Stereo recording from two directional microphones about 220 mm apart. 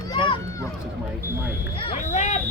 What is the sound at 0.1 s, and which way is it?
Run, 15° left (ahead or behind).